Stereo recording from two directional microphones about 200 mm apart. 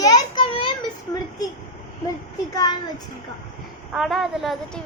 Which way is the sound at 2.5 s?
20° left (ahead or behind).